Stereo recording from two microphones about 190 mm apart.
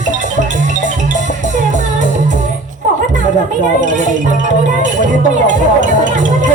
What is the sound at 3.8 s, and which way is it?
Speech, 40° right (ahead or behind).